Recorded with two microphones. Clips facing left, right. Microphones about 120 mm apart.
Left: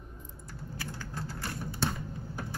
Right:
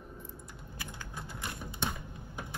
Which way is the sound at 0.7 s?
20° right (ahead or behind).